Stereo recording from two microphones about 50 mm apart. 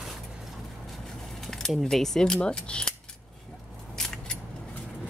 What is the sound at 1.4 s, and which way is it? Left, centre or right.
Keys jangling, centre.